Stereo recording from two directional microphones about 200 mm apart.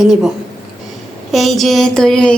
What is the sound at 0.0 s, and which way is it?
Speech, centre (ahead or behind).